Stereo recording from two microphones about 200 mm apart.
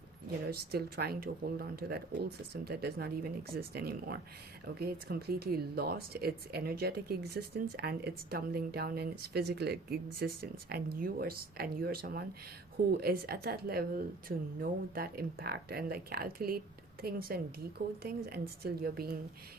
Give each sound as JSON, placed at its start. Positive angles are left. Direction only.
{"t": 0.5, "sound": "speech", "side_deg": -50}